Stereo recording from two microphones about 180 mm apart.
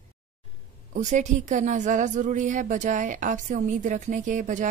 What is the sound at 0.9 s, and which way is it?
A woman's voice, 40° right (ahead or behind).